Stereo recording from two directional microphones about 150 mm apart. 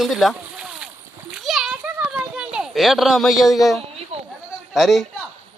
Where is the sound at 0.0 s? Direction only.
Centre (ahead or behind).